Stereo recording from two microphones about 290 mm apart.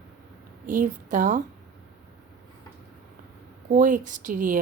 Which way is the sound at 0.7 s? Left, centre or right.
Right.